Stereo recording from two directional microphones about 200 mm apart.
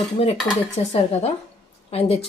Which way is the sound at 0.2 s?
30° left (ahead or behind).